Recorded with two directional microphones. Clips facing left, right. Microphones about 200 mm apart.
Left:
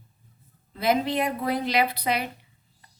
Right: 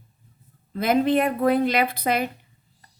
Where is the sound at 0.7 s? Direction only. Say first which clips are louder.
Right 4 dB; 50° right (ahead or behind).